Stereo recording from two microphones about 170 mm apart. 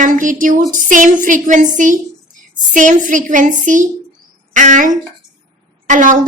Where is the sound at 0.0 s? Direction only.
50° right (ahead or behind).